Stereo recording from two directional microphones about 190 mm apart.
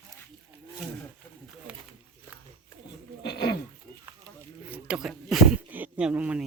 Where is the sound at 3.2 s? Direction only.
60° left (ahead or behind).